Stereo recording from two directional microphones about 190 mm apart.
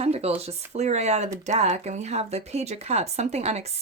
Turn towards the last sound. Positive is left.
turn(degrees=-35)  # may be behind; listen again after turning